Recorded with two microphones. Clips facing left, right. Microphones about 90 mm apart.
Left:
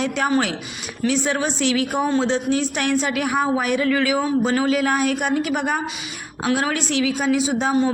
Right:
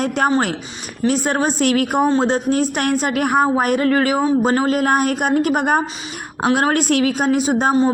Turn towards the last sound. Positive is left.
turn(degrees=-50)  # may be behind; listen again after turning